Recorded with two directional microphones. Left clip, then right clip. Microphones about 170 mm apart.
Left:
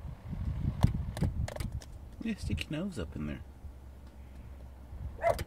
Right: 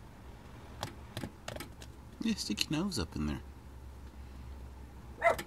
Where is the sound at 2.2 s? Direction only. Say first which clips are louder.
Right 4 dB; 20° left (ahead or behind).